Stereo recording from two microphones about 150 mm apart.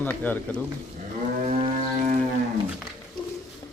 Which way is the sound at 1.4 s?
50° right (ahead or behind).